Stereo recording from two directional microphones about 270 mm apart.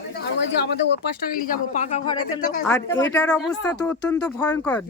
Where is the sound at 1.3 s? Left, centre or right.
Left.